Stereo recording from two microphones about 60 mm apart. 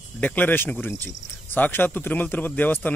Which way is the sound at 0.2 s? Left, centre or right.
Left.